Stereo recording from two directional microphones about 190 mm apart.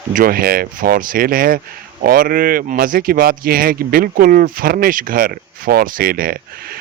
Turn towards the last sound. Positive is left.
turn(degrees=-50)  # may be behind; listen again after turning